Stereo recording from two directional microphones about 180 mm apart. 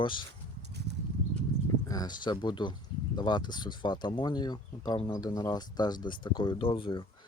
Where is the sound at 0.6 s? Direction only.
70° right (ahead or behind).